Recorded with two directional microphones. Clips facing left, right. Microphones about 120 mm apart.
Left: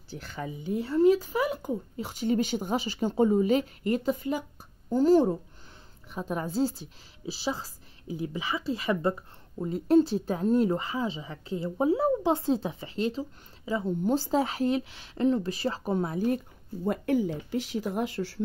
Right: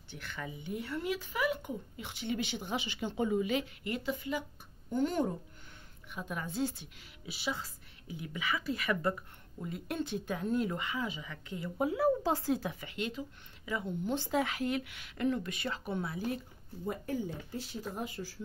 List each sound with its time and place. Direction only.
0.1 s speech: 35° left (ahead or behind)
16.8 s speech: 70° left (ahead or behind)